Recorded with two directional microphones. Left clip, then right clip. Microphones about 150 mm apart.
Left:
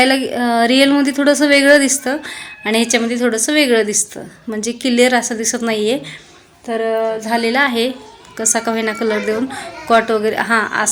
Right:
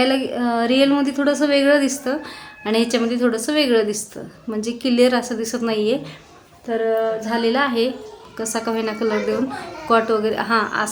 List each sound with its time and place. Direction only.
0.0 s a woman's voice: 20° left (ahead or behind)